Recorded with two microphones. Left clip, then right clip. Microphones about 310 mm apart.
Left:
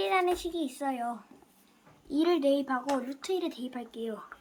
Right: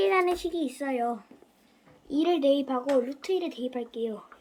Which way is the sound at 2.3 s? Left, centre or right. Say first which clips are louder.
Right 3 dB; centre.